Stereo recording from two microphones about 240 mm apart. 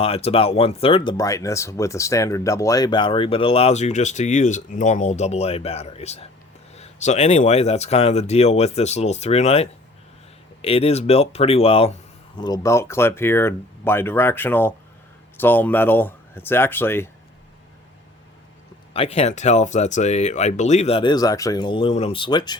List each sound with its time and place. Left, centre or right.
0.0 s speech: left
18.9 s speech: left